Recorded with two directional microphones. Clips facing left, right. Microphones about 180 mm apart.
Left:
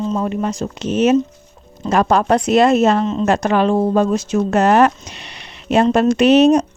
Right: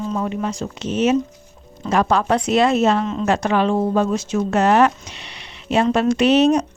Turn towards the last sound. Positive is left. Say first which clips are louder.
# left 4 dB
turn(degrees=45)  # may be behind; listen again after turning